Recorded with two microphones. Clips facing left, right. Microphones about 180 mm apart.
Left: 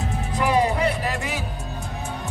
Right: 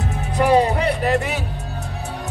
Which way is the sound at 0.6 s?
65° right (ahead or behind).